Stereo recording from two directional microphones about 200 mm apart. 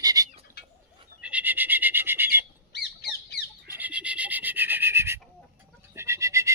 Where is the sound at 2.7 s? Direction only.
55° left (ahead or behind).